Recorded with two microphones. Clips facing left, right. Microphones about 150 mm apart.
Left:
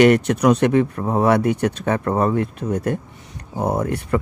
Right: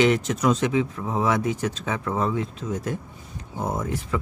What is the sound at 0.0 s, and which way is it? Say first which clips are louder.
Speech: left 6 dB; 65° left (ahead or behind).